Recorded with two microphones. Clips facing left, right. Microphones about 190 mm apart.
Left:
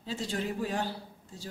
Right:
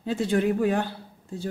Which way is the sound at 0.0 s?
55° right (ahead or behind).